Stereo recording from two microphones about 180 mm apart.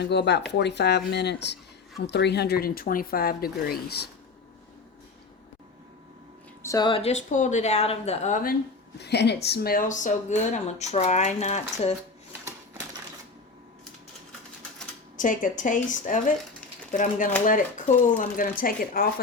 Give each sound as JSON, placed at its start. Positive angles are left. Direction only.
{"t": 0.0, "sound": "speech", "side_deg": 70}
{"t": 6.6, "sound": "speech", "side_deg": 20}
{"t": 9.0, "sound": "speech", "side_deg": 65}
{"t": 15.1, "sound": "speech", "side_deg": 45}